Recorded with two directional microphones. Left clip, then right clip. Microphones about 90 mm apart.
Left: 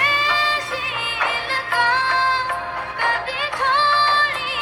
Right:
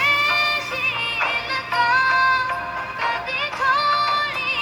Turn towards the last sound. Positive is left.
turn(degrees=35)  # may be behind; listen again after turning